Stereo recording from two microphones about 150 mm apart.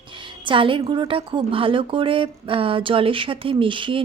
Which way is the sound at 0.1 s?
30° right (ahead or behind).